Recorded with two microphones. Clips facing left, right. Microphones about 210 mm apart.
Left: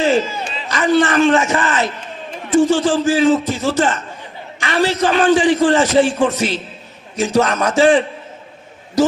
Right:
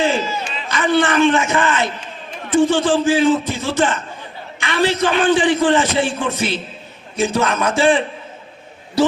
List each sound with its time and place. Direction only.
0.0 s a man's voice: 40° left (ahead or behind)